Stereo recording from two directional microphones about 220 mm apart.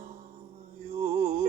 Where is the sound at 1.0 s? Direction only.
30° right (ahead or behind).